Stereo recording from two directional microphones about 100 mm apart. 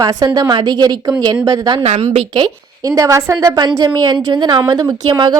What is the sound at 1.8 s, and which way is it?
Speech, 90° right.